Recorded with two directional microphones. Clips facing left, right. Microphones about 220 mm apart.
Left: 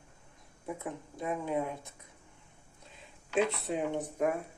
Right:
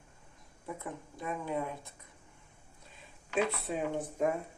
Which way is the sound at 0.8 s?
20° left (ahead or behind).